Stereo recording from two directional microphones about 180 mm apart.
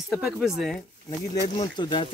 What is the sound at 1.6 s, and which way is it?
Speech, 25° left (ahead or behind).